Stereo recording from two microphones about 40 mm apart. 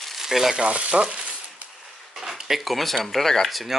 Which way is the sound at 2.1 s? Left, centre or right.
Centre.